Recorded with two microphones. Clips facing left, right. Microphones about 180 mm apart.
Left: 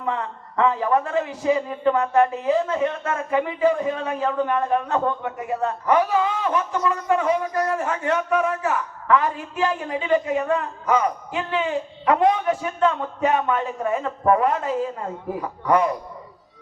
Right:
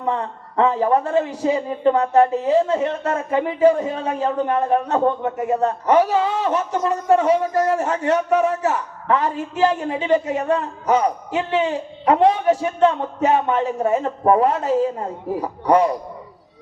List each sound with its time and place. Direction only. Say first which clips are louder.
0.0 s a man's voice: right 3 dB; 35° right (ahead or behind)
12.0 s a man's voice: right 4 dB; 25° right (ahead or behind)